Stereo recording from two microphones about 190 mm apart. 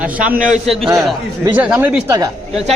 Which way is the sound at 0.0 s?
5° right (ahead or behind).